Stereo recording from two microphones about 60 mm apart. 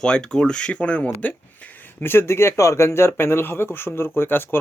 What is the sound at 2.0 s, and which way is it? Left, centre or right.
Speech, left.